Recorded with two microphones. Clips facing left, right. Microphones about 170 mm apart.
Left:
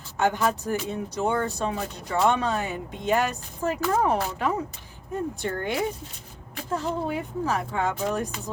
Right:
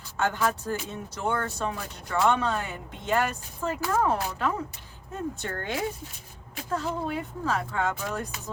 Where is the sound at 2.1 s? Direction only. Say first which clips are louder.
Left 1 dB; 20° left (ahead or behind).